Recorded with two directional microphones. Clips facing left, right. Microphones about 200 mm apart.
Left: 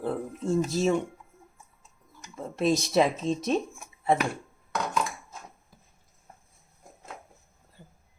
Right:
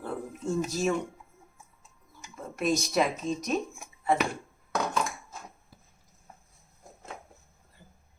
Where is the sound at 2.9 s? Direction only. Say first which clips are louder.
Left 3 dB; 30° left (ahead or behind).